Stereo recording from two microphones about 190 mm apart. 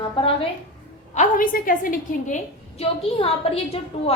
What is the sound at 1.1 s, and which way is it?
A woman's voice, 45° left (ahead or behind).